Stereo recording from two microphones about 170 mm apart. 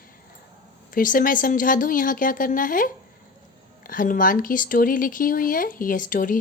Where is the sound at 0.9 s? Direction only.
55° left (ahead or behind).